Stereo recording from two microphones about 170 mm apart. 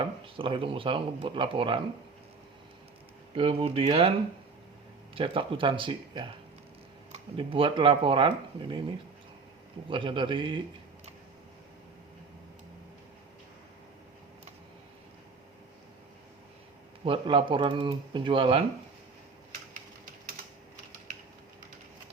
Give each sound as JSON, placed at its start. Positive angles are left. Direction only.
{"t": 0.0, "sound": "speech", "side_deg": -30}
{"t": 3.3, "sound": "speech", "side_deg": -35}
{"t": 5.1, "sound": "speech", "side_deg": -30}
{"t": 9.9, "sound": "speech", "side_deg": -30}
{"t": 17.1, "sound": "speech", "side_deg": -30}